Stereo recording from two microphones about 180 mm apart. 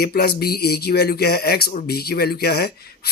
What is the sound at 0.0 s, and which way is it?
Speech, 60° left (ahead or behind).